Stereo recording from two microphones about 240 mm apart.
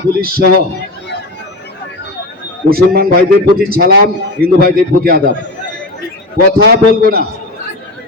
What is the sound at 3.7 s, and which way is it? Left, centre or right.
Speech, right.